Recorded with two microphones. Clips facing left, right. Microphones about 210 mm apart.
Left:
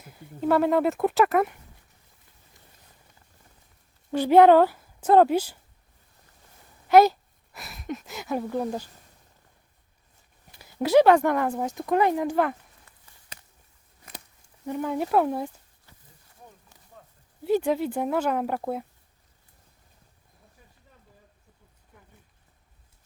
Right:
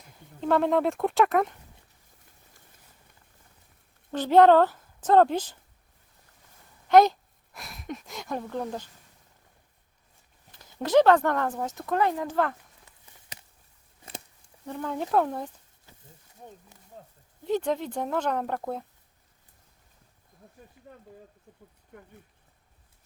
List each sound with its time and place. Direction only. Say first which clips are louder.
0.0 s speech: left 5 dB; 5° left (ahead or behind)
4.1 s speech: left 2 dB; 10° left (ahead or behind)
6.8 s speech: left 1 dB; 5° left (ahead or behind)
10.5 s speech: left 2 dB; 10° left (ahead or behind)
14.7 s speech: left 3 dB; 15° left (ahead or behind)
17.4 s speech: left 4 dB; 10° left (ahead or behind)
20.9 s a sound: right 14 dB; 55° right (ahead or behind)